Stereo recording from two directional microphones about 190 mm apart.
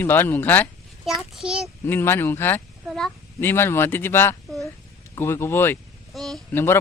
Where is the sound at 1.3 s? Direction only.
5° right (ahead or behind).